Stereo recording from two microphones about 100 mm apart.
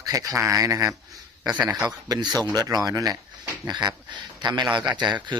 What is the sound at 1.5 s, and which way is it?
Speech, 45° right (ahead or behind).